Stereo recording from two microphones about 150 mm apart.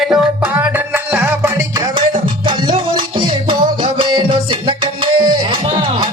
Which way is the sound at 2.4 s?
30° right (ahead or behind).